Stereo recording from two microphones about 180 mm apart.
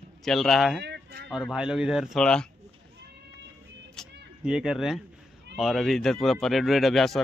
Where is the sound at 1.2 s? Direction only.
Centre (ahead or behind).